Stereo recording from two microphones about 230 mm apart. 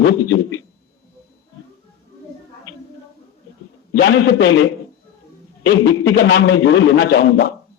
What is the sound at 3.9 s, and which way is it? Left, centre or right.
Speech, left.